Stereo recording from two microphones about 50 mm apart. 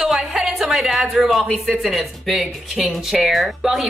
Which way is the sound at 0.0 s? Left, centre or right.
Centre.